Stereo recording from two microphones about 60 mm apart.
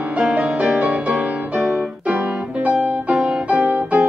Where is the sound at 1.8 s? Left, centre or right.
Centre.